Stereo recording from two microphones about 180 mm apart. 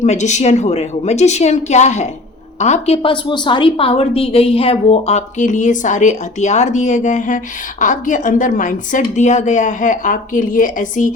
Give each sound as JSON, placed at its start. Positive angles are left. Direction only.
{"t": 0.0, "sound": "a woman's voice", "side_deg": 40}